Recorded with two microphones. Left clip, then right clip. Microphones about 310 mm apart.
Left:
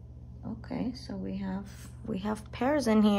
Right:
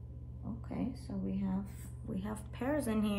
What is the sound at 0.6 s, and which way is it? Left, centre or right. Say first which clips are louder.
Speech: left 5 dB; left.